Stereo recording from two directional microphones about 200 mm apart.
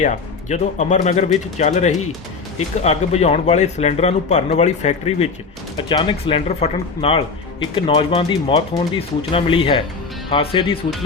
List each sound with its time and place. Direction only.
0.0 s speech: 35° left (ahead or behind)
5.7 s speech: 25° left (ahead or behind)